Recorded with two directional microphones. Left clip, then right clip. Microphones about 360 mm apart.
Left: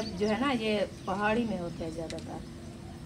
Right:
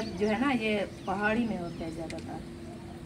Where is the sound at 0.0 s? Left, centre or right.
Centre.